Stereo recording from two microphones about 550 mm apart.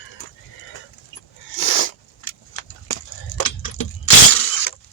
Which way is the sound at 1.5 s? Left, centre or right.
Left.